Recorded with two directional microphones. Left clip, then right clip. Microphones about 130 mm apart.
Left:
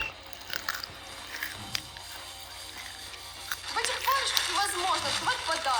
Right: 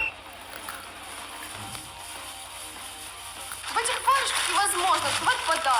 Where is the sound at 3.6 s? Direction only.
50° right (ahead or behind).